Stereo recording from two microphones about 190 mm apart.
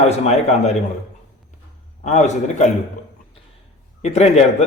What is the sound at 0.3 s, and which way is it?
Speech, 35° left (ahead or behind).